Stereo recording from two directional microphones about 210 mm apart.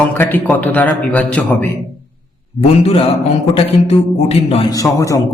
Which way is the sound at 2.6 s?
30° left (ahead or behind).